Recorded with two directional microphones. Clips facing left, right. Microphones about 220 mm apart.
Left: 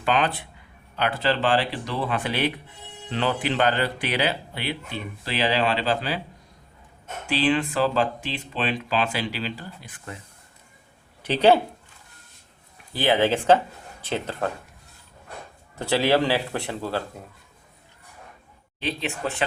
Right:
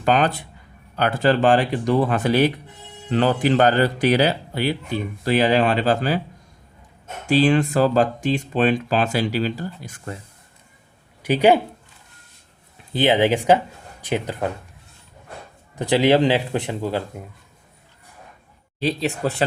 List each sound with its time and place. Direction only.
0.0 s speech: 40° right (ahead or behind)
7.3 s speech: 45° right (ahead or behind)
11.2 s speech: 10° right (ahead or behind)
12.9 s speech: 20° right (ahead or behind)
15.7 s speech: 15° right (ahead or behind)
18.8 s speech: 35° right (ahead or behind)